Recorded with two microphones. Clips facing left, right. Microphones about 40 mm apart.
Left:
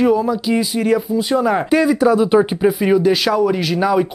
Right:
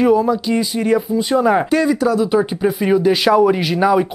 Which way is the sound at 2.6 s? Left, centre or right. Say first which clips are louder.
Left 1 dB; centre.